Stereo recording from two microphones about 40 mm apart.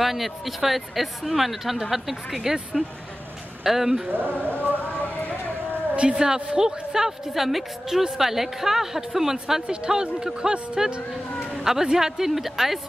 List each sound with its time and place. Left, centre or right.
0.0 s a woman's voice: centre
4.3 s speech: left
5.9 s a woman's voice: centre
11.6 s a woman's voice: centre